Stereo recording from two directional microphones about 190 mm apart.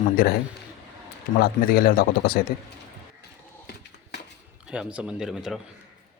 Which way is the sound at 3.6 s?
60° left (ahead or behind).